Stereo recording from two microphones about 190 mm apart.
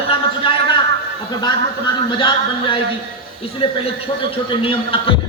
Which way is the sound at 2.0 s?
25° left (ahead or behind).